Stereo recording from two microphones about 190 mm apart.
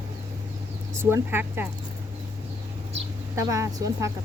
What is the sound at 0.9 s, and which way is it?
Speech, 15° right (ahead or behind).